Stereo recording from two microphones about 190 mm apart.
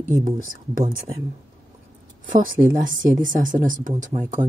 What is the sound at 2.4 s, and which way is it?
Speech, 45° right (ahead or behind).